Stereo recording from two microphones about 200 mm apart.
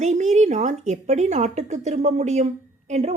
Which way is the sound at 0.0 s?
35° right (ahead or behind).